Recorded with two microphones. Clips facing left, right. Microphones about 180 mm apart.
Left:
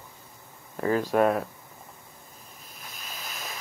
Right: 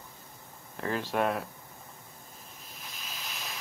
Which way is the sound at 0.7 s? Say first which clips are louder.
Left 7 dB; 5° left (ahead or behind).